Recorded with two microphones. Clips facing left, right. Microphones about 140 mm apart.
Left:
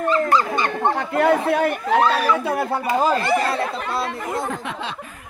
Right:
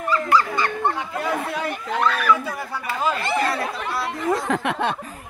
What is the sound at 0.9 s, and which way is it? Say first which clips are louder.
Speech: left 7 dB; 65° left (ahead or behind).